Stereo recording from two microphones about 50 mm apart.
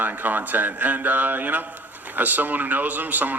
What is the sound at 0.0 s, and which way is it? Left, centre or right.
A man's voice, right.